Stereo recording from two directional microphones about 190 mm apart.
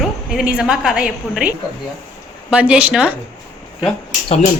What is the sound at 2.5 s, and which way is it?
Speech, 5° right (ahead or behind).